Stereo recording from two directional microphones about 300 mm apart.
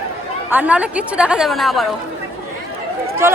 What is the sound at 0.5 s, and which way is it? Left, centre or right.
A woman's voice, centre.